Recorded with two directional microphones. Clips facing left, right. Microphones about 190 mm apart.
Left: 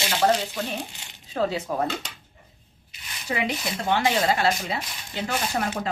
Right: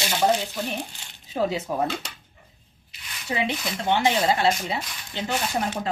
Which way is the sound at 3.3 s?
25° right (ahead or behind).